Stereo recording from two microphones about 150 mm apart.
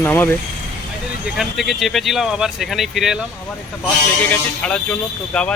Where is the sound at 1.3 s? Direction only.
Centre (ahead or behind).